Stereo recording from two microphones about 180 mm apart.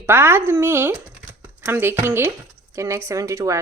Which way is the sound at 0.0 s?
15° right (ahead or behind).